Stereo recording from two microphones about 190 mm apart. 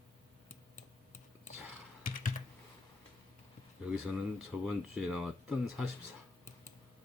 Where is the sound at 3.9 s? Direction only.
5° right (ahead or behind).